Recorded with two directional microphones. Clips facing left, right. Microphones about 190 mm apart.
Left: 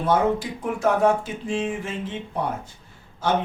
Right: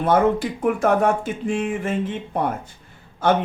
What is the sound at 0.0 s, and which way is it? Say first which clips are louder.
Speech: right 3 dB; 55° right (ahead or behind).